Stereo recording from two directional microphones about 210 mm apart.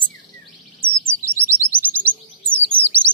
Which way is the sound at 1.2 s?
10° right (ahead or behind).